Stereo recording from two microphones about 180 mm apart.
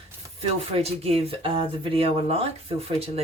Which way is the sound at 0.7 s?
35° right (ahead or behind).